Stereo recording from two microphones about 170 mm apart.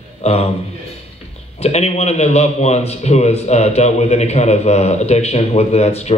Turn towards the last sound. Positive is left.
turn(degrees=40)  # may be behind; listen again after turning